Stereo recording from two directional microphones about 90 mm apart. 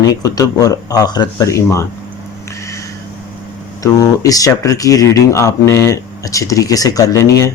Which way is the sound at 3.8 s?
40° left (ahead or behind).